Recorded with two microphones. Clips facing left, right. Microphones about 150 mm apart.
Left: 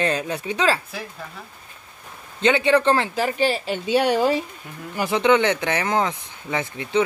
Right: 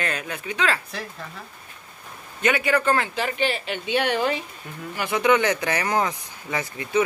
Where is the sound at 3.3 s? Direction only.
40° left (ahead or behind).